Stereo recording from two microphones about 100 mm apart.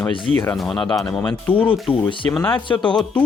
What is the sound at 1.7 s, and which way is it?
Speech, 60° left (ahead or behind).